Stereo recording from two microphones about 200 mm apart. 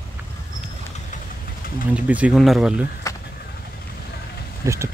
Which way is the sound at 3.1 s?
15° left (ahead or behind).